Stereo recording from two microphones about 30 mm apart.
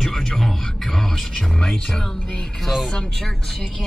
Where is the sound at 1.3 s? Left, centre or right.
Centre.